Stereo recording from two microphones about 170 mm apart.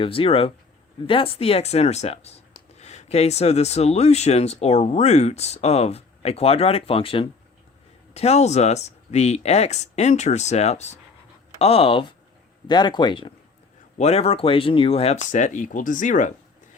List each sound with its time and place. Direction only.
0.0 s speech: 35° left (ahead or behind); by 16.3 s 50° left (ahead or behind)